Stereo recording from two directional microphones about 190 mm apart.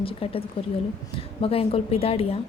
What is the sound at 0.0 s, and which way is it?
A woman's voice, 30° left (ahead or behind).